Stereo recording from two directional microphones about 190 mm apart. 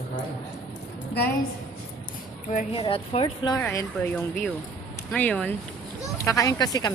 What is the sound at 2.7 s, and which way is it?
Speech, 30° left (ahead or behind).